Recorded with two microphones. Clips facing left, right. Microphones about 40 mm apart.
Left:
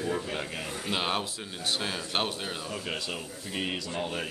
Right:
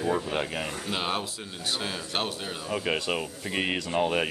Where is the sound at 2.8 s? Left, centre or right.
Right.